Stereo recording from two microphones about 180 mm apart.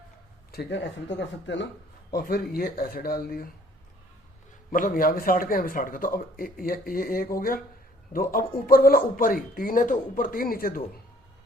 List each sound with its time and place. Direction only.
0.5 s speech: 75° left (ahead or behind)
2.1 s speech: 55° left (ahead or behind)
4.7 s speech: 50° left (ahead or behind)